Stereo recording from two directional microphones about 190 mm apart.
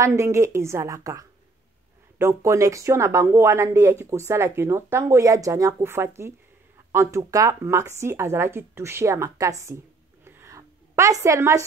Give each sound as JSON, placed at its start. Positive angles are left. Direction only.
{"t": 0.0, "sound": "speech", "side_deg": -15}
{"t": 10.2, "sound": "a sound", "side_deg": -15}
{"t": 11.2, "sound": "speech", "side_deg": -15}